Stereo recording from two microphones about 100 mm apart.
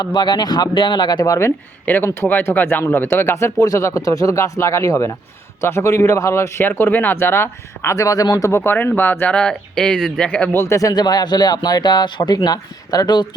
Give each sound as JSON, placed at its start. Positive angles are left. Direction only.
{"t": 0.0, "sound": "speech", "side_deg": 45}
{"t": 1.8, "sound": "speech", "side_deg": 20}
{"t": 7.9, "sound": "speech", "side_deg": 35}
{"t": 10.5, "sound": "speech", "side_deg": 25}